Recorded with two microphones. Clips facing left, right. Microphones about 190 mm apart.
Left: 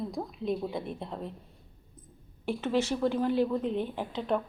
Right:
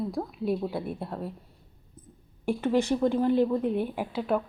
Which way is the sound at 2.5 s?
15° right (ahead or behind).